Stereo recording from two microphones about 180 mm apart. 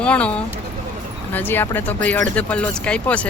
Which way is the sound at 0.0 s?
5° left (ahead or behind).